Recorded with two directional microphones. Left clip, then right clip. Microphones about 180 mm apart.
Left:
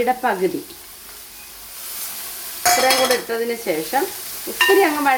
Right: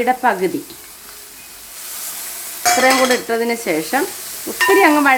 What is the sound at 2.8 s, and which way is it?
Stir, 30° right (ahead or behind).